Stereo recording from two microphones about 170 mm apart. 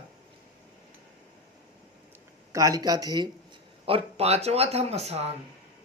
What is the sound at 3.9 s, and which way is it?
Speech, 35° right (ahead or behind).